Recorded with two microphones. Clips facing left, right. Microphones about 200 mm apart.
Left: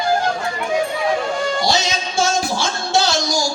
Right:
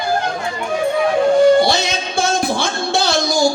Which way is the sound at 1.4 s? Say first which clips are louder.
Right 8 dB; 60° right (ahead or behind).